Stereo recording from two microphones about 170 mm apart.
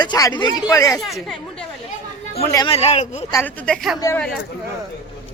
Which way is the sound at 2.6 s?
35° left (ahead or behind).